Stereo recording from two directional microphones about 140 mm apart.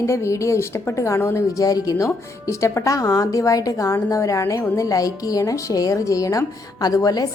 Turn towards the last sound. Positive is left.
turn(degrees=25)  # may be behind; listen again after turning